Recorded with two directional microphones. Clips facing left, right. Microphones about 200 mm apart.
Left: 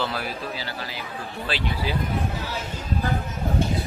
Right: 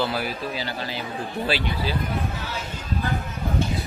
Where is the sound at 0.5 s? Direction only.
25° right (ahead or behind).